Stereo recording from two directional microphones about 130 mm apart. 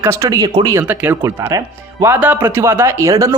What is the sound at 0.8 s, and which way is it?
Speech, 15° right (ahead or behind).